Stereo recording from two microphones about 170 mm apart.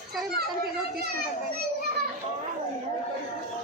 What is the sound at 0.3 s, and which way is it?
Speech, 65° right (ahead or behind).